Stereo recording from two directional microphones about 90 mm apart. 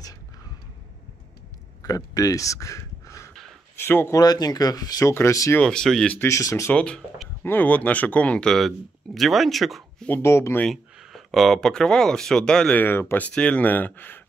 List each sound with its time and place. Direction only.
1.8 s speech: 40° left (ahead or behind)
3.8 s speech: 25° left (ahead or behind)
4.1 s speech: 45° left (ahead or behind)
5.6 s speech: 10° left (ahead or behind)
6.2 s speech: 35° left (ahead or behind)
6.7 s speech: 10° left (ahead or behind)
10.0 s speech: 25° left (ahead or behind)
10.7 s speech: centre (ahead or behind); by 14.2 s 20° left (ahead or behind)